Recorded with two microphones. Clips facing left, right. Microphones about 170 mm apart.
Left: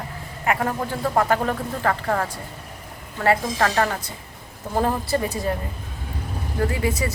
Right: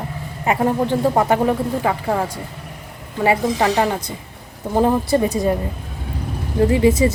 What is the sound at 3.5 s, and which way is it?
Speech, 15° right (ahead or behind).